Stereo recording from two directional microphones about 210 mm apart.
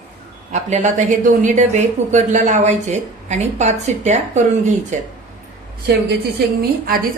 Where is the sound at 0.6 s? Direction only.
35° right (ahead or behind).